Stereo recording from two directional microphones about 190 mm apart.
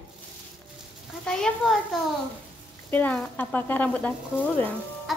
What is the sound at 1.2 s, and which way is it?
Speech, 5° left (ahead or behind).